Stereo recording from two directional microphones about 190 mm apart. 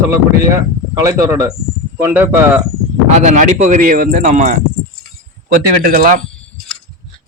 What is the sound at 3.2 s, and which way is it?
Speech, 40° right (ahead or behind).